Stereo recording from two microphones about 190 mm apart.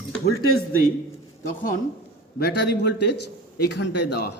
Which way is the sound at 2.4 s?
60° left (ahead or behind).